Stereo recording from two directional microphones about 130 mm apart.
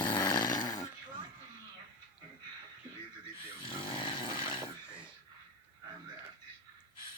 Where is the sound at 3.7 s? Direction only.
40° left (ahead or behind).